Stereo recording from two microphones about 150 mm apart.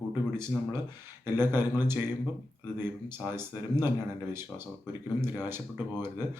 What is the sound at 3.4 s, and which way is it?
Speech, 15° right (ahead or behind).